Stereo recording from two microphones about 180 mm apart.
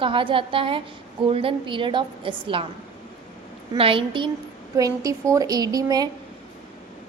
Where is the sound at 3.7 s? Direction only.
30° right (ahead or behind).